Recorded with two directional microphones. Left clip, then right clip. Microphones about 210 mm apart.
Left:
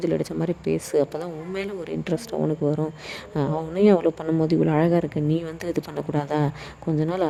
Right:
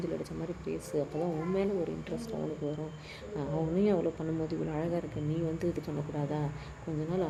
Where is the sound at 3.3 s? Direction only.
45° left (ahead or behind).